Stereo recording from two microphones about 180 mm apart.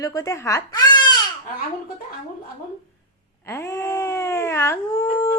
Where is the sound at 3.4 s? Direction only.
15° left (ahead or behind).